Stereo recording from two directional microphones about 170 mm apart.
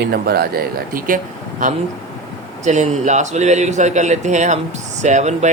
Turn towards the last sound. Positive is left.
turn(degrees=-40)  # may be behind; listen again after turning